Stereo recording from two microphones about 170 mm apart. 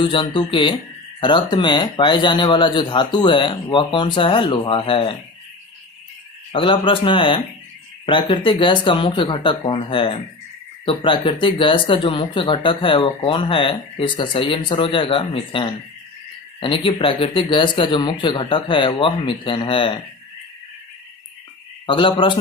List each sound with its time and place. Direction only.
0.0 s speech: 30° left (ahead or behind)
6.5 s speech: 30° left (ahead or behind)
21.8 s speech: 30° left (ahead or behind)